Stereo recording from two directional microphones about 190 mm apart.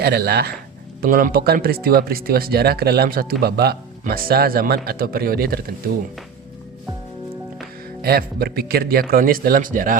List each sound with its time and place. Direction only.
0.0 s speech: 55° right (ahead or behind)
8.0 s speech: 55° right (ahead or behind)